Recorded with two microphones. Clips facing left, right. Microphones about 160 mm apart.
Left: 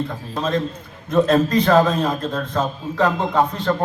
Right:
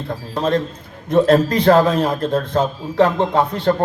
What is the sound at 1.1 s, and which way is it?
A man's voice, 55° right (ahead or behind).